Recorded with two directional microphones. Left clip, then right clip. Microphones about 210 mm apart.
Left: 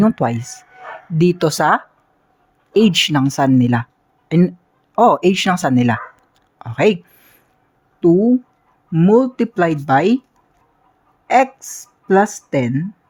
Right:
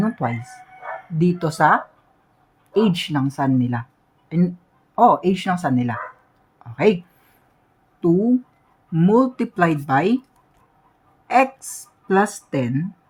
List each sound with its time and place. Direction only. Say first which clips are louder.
0.0 s speech: left 7 dB; 40° left (ahead or behind)
6.6 s a sound: left 3 dB; 45° left (ahead or behind)
8.0 s speech: left 5 dB; 25° left (ahead or behind)
11.3 s speech: left 3 dB; 30° left (ahead or behind)